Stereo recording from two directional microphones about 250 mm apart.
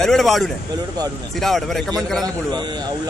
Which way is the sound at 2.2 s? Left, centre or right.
Centre.